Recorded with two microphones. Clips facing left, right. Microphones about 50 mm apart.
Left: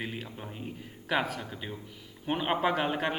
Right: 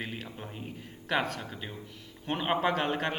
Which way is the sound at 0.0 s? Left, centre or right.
Centre.